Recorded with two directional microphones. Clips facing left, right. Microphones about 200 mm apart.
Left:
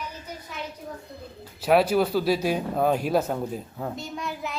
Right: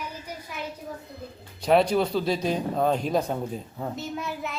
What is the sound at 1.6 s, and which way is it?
A man's voice, 5° left (ahead or behind).